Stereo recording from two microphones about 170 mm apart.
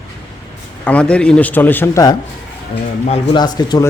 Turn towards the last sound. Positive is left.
turn(degrees=25)  # may be behind; listen again after turning